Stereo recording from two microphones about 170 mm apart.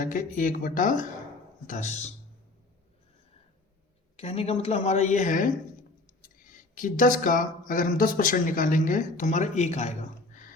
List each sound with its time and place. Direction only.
0.0 s speech: 50° left (ahead or behind)
4.2 s a woman's voice: 35° left (ahead or behind)